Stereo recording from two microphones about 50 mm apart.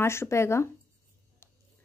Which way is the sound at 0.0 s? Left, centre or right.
Left.